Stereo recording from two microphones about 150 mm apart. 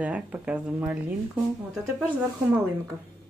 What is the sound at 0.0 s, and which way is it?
Speech, 10° right (ahead or behind).